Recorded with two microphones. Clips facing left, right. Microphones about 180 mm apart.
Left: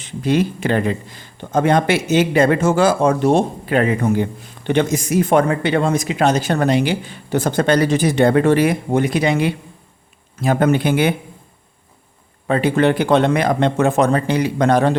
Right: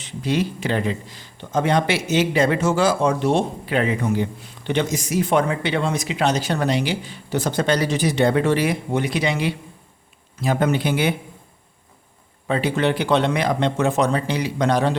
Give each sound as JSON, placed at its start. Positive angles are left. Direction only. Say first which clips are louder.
{"t": 0.0, "sound": "speech", "louder": "left 5 dB", "side_deg": 50}
{"t": 12.5, "sound": "speech", "louder": "left 5 dB", "side_deg": 55}